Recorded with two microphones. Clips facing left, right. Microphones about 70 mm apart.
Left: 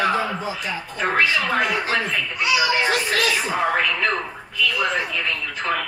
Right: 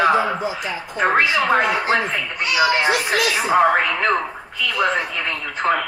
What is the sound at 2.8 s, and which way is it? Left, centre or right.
Speech, right.